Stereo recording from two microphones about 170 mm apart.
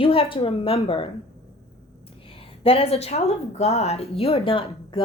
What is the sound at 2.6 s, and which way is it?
A woman's voice, 35° left (ahead or behind).